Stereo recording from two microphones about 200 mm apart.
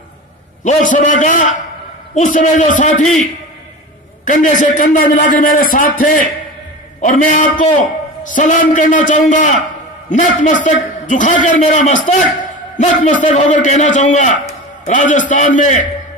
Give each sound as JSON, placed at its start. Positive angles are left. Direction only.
{"t": 0.7, "sound": "a man's voice", "side_deg": 40}
{"t": 4.2, "sound": "a man's voice", "side_deg": 40}